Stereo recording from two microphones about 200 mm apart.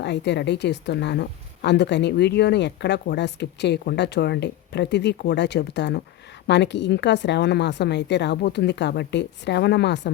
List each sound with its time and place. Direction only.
0.0 s a woman's voice: 60° left (ahead or behind)